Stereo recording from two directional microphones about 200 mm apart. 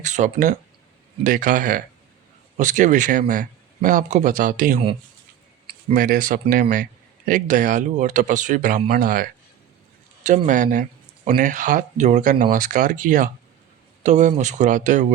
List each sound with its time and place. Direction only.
0.0 s speech: 35° right (ahead or behind)
5.9 s speech: 45° right (ahead or behind)